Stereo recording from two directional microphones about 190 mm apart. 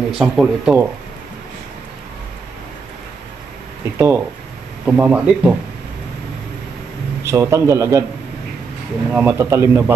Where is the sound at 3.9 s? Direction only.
15° right (ahead or behind).